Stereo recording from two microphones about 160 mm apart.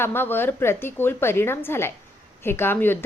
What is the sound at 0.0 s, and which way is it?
Speech, 15° left (ahead or behind).